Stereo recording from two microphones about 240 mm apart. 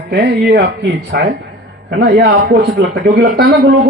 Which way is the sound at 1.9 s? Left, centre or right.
Right.